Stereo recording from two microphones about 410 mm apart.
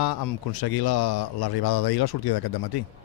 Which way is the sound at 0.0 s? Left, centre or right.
Left.